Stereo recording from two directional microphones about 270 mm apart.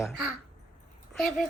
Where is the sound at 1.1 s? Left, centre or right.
Centre.